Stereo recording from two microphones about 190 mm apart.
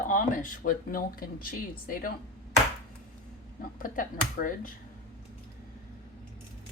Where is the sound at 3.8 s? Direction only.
45° left (ahead or behind).